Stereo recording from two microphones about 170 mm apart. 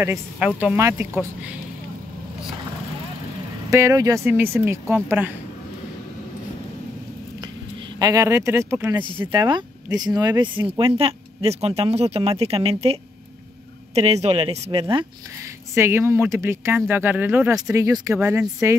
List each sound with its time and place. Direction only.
0.0 s speech: 15° right (ahead or behind)
3.7 s speech: 20° right (ahead or behind)
8.0 s speech: 20° right (ahead or behind)
9.3 s speech: 25° right (ahead or behind)
15.7 s speech: 15° right (ahead or behind)